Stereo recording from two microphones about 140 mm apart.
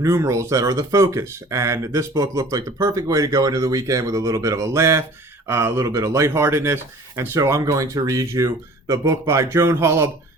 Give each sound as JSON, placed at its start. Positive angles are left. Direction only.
{"t": 0.0, "sound": "speech", "side_deg": -20}